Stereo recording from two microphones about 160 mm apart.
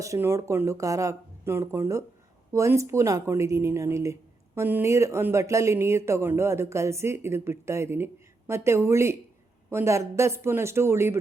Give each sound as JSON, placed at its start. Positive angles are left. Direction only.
{"t": 0.0, "sound": "a woman's voice", "side_deg": -15}